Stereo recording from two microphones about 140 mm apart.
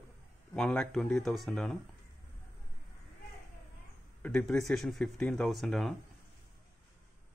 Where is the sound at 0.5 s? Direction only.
5° left (ahead or behind).